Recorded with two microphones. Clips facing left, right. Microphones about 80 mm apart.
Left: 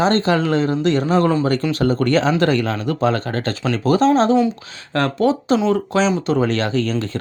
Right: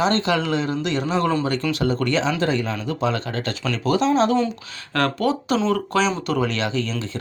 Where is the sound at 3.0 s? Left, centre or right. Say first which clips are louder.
Left 4 dB; left.